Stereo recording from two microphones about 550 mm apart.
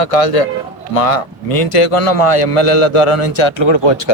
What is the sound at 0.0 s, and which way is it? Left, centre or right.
A man's voice, left.